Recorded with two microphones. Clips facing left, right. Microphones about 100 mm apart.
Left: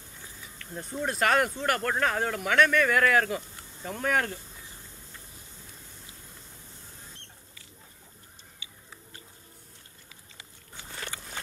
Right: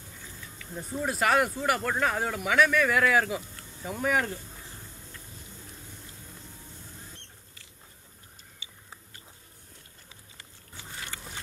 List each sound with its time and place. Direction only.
0.6 s speech: 5° right (ahead or behind)